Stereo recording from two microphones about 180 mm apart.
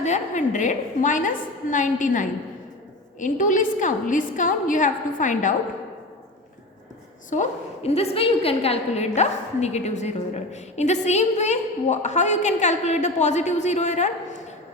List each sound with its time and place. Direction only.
0.0 s a woman's voice: 40° left (ahead or behind)
7.3 s a woman's voice: 40° left (ahead or behind)